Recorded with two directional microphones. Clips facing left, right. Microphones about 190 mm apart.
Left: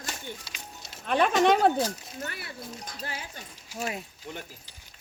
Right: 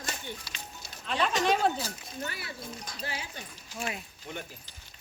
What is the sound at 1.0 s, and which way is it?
Speech, 55° left (ahead or behind).